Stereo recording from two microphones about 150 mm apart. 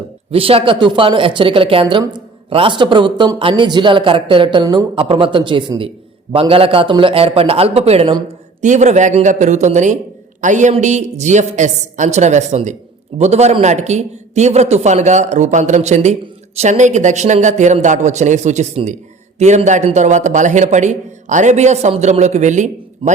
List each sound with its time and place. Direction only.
0.3 s a man's voice: 40° right (ahead or behind)